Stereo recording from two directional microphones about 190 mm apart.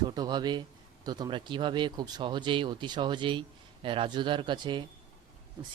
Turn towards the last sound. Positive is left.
turn(degrees=-25)  # may be behind; listen again after turning